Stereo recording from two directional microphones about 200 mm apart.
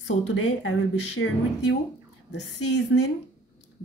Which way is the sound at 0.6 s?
75° left (ahead or behind).